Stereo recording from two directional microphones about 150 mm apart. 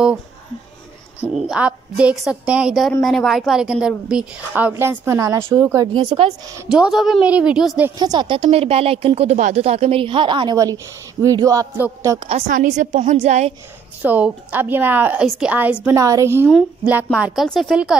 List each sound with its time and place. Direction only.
1.2 s a woman's voice: 5° right (ahead or behind)
5.9 s speech: 35° right (ahead or behind)
6.7 s a woman's voice: 5° right (ahead or behind)
8.0 s speech: 30° right (ahead or behind)
11.2 s a sound: 20° right (ahead or behind)
12.2 s speech: 40° right (ahead or behind)
12.4 s a woman's voice: 60° right (ahead or behind)
14.0 s a woman's voice: 10° right (ahead or behind)
15.2 s a woman's voice: centre (ahead or behind)
16.0 s a sound: 20° right (ahead or behind)
16.4 s a woman's voice: centre (ahead or behind)